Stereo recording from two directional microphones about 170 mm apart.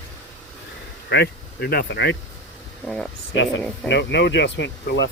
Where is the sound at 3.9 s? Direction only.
90° left.